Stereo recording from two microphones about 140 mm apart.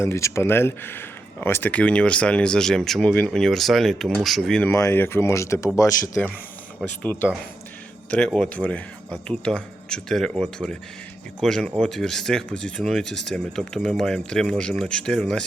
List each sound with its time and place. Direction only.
0.0 s speech: 20° left (ahead or behind); by 4.7 s 5° left (ahead or behind)
4.7 s speech: 20° left (ahead or behind)
6.2 s speech: 10° left (ahead or behind)
8.4 s speech: 10° left (ahead or behind)